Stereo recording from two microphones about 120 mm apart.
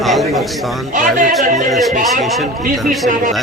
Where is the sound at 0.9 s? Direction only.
90° right.